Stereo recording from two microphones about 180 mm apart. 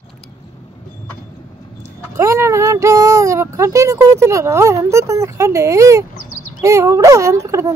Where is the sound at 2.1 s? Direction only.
15° right (ahead or behind).